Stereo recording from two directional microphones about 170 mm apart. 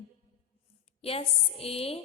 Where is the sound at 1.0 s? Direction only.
35° left (ahead or behind).